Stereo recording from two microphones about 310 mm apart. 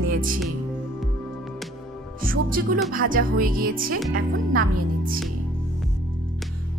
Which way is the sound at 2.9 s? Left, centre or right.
Right.